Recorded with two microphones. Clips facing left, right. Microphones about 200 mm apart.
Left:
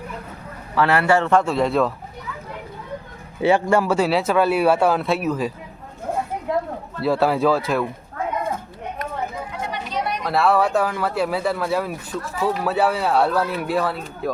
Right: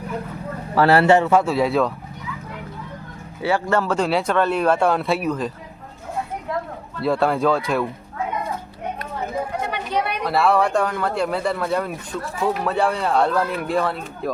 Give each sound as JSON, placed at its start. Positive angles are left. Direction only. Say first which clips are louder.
{"t": 0.8, "sound": "a man's voice", "louder": "right 4 dB", "side_deg": -35}
{"t": 1.2, "sound": "speech", "louder": "right 1 dB", "side_deg": -5}
{"t": 3.4, "sound": "speech", "louder": "left 3 dB", "side_deg": 15}
{"t": 7.0, "sound": "speech", "louder": "left 1 dB", "side_deg": 5}
{"t": 9.6, "sound": "chatter", "louder": "even", "side_deg": -60}
{"t": 10.2, "sound": "speech", "louder": "left 1 dB", "side_deg": 0}